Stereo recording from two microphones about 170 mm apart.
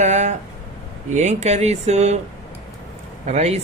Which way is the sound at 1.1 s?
45° right (ahead or behind).